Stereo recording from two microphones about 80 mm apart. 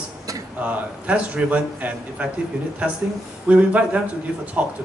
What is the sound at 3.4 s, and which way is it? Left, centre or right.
A man's voice, centre.